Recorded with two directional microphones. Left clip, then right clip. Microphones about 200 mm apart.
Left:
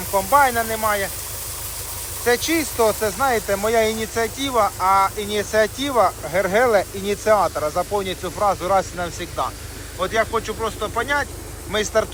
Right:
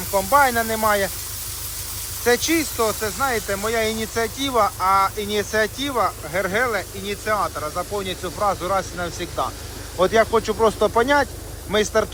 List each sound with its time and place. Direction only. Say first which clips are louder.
0.1 s speech: left 1 dB; 10° right (ahead or behind)
2.2 s speech: even; 15° right (ahead or behind)